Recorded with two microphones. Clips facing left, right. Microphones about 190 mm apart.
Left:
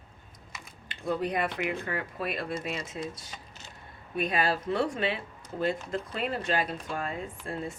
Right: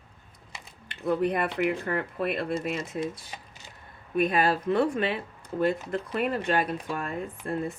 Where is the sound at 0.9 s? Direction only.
60° right (ahead or behind).